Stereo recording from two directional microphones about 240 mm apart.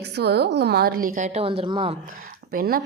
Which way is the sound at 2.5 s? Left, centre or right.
Right.